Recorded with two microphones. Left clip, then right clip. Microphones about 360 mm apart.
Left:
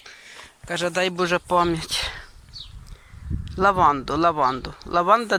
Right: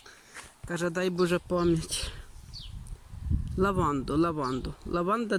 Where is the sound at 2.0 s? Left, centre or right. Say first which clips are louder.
Left 11 dB; left.